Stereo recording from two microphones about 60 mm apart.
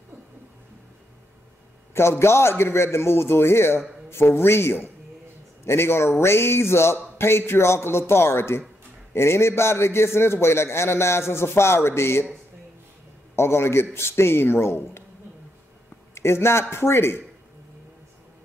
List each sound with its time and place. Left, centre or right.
2.0 s a man's voice: left
13.4 s a man's voice: left
16.2 s a man's voice: left